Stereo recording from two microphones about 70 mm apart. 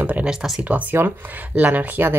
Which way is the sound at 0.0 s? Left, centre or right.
Right.